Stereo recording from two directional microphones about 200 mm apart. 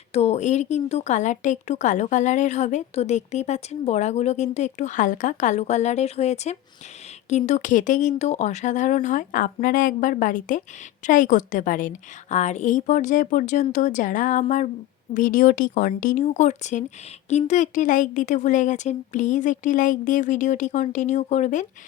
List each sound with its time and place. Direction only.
0.1 s a woman's voice: 30° left (ahead or behind)